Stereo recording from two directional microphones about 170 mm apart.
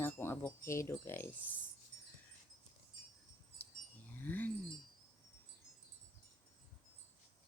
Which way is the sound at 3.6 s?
10° left (ahead or behind).